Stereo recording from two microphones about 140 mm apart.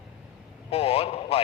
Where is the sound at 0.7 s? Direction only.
45° left (ahead or behind).